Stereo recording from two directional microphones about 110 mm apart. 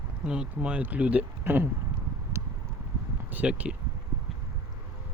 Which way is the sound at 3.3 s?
10° right (ahead or behind).